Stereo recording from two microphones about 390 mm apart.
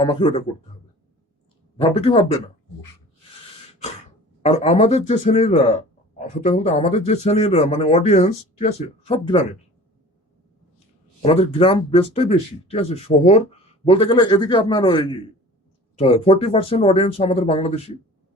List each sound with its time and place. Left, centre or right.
0.0 s speech: centre
1.8 s speech: centre
4.4 s speech: centre
11.2 s speech: centre